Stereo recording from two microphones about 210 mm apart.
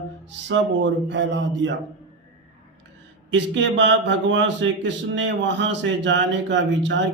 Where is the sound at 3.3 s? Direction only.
60° right (ahead or behind).